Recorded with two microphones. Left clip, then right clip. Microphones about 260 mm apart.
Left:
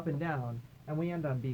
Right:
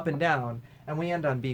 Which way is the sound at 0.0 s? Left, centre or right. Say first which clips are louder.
Right 10 dB; right.